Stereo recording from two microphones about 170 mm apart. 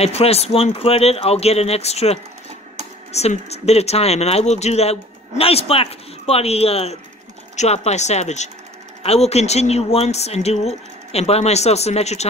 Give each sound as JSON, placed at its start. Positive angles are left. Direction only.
{"t": 0.0, "sound": "speech", "side_deg": 35}